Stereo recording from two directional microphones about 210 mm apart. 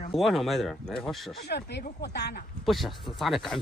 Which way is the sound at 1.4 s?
50° left (ahead or behind).